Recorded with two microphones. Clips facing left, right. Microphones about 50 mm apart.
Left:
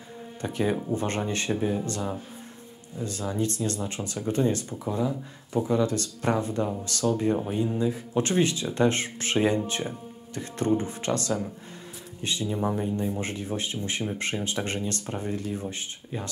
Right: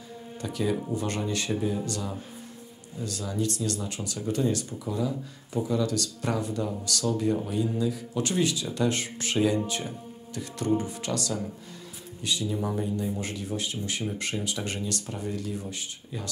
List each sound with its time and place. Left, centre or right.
0.4 s speech: left